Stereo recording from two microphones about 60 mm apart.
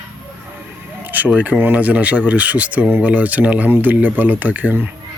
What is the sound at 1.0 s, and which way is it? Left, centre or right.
Speech, right.